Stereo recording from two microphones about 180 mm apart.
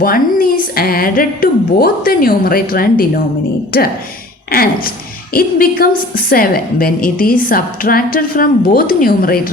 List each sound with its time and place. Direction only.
0.0 s a woman's voice: 55° left (ahead or behind)
5.3 s a woman's voice: 55° left (ahead or behind)